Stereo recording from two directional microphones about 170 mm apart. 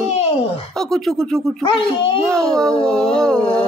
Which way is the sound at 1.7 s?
30° left (ahead or behind).